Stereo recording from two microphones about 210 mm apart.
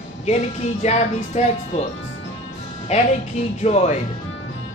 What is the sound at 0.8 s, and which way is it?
A woman's voice, 30° left (ahead or behind).